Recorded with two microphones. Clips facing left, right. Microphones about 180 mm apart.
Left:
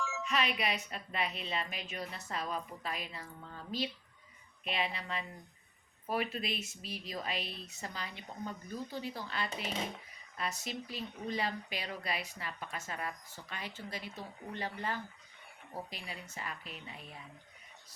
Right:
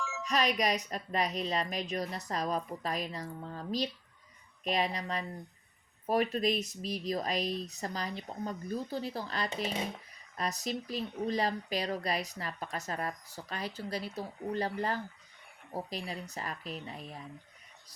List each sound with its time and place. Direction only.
0.0 s music: centre (ahead or behind)
0.3 s speech: 40° right (ahead or behind)